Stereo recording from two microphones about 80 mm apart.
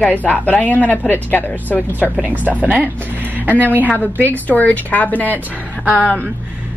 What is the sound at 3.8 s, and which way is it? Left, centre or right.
Speech, centre.